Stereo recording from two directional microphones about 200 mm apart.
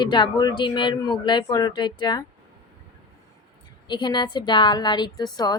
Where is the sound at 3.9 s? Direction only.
20° left (ahead or behind).